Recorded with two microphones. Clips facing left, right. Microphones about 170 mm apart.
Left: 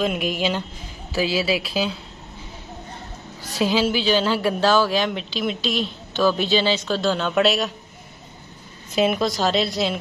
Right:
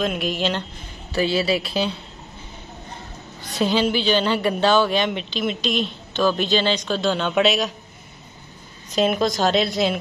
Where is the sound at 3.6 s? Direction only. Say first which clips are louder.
Even; 5° left (ahead or behind).